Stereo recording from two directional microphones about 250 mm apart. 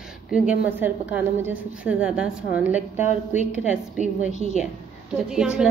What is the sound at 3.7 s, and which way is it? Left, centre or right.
Speech, centre.